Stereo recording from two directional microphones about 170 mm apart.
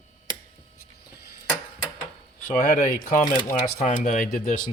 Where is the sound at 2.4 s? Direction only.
50° left (ahead or behind).